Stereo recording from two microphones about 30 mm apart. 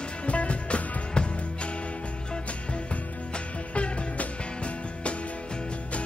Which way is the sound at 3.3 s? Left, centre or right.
Left.